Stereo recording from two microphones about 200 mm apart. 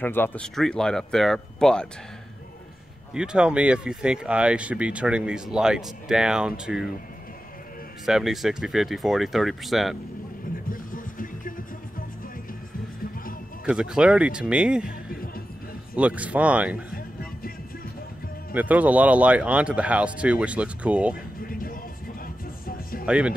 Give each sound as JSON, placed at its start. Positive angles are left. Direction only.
{"t": 0.0, "sound": "speech", "side_deg": 10}
{"t": 3.2, "sound": "speech", "side_deg": -5}
{"t": 8.0, "sound": "speech", "side_deg": 0}
{"t": 10.5, "sound": "music", "side_deg": 45}
{"t": 13.7, "sound": "speech", "side_deg": -5}
{"t": 14.9, "sound": "music", "side_deg": 45}
{"t": 16.0, "sound": "speech", "side_deg": -5}
{"t": 16.9, "sound": "music", "side_deg": 45}
{"t": 18.5, "sound": "speech", "side_deg": -10}
{"t": 21.4, "sound": "music", "side_deg": 45}
{"t": 23.0, "sound": "speech", "side_deg": -5}